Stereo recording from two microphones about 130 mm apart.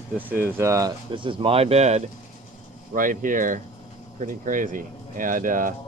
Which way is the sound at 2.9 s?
90° right.